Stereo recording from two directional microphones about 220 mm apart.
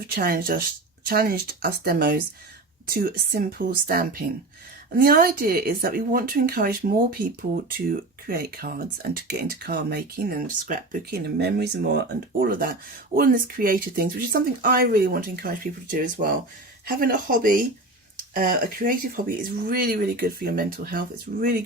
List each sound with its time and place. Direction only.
0.1 s speech: 40° right (ahead or behind)